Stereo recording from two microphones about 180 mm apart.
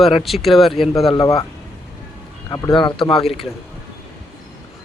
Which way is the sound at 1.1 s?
20° left (ahead or behind).